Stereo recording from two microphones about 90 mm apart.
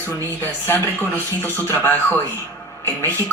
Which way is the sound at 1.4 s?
25° left (ahead or behind).